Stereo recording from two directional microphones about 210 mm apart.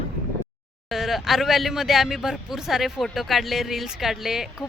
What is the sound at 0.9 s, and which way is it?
Speech, centre (ahead or behind).